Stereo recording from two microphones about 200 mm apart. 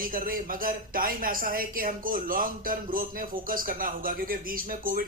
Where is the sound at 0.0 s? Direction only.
45° right (ahead or behind).